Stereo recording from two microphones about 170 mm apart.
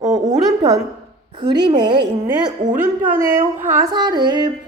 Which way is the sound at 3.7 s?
20° right (ahead or behind).